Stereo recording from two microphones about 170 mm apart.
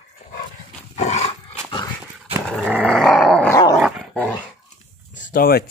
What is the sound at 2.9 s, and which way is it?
Dog, centre (ahead or behind).